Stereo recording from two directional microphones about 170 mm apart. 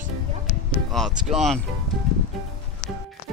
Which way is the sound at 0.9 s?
Centre (ahead or behind).